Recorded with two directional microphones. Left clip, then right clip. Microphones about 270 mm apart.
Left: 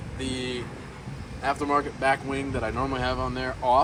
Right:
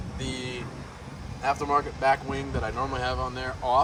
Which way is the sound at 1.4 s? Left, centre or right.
Centre.